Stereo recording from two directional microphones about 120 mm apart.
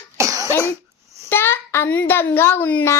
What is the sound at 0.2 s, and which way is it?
Cough, 25° right (ahead or behind).